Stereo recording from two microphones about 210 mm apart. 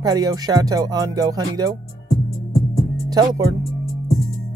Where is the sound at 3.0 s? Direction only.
20° right (ahead or behind).